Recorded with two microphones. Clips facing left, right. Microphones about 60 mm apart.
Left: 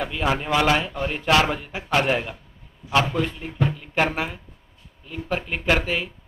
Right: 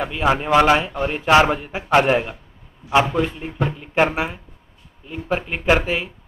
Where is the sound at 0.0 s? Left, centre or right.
Centre.